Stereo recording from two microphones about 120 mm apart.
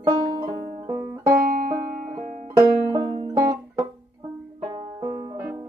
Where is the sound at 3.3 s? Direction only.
25° right (ahead or behind).